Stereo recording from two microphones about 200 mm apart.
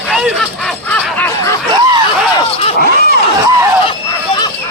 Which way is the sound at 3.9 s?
25° left (ahead or behind).